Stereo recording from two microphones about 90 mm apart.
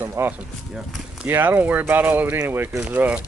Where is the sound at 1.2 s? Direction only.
20° right (ahead or behind).